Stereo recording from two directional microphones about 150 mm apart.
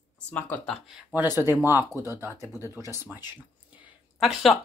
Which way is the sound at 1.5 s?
15° right (ahead or behind).